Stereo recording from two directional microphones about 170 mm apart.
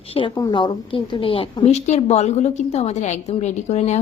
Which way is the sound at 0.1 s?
30° left (ahead or behind).